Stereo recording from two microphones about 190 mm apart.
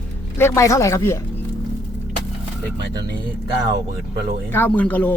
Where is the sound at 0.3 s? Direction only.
15° left (ahead or behind).